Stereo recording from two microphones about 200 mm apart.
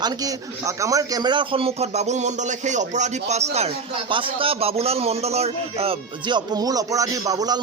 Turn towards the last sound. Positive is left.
turn(degrees=-20)  # may be behind; listen again after turning